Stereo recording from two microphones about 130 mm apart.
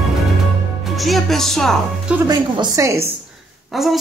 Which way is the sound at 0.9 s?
Centre (ahead or behind).